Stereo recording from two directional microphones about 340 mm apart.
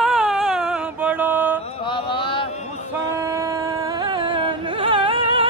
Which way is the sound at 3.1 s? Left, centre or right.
Centre.